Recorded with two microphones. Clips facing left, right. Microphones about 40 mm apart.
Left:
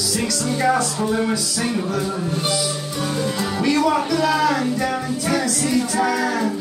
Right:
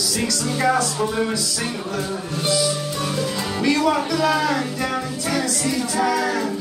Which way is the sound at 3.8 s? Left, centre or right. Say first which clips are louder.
Left 1 dB; centre.